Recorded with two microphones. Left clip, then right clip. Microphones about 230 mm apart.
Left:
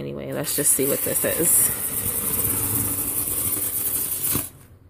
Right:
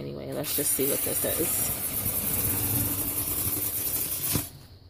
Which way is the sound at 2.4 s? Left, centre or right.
Left.